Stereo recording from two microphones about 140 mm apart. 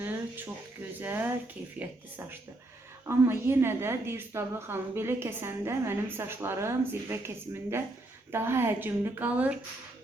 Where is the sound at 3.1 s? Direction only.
15° right (ahead or behind).